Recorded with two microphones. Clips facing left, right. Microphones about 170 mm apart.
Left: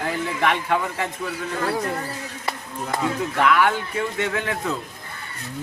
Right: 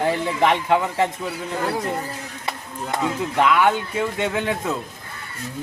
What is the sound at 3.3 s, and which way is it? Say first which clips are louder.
A man's voice: right 2 dB; 20° right (ahead or behind).